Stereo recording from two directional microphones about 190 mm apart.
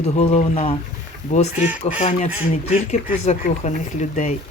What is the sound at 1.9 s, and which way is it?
Speech, 35° left (ahead or behind).